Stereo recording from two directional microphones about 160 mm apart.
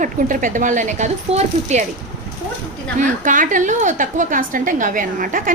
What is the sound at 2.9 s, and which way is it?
A woman's voice, 55° right (ahead or behind).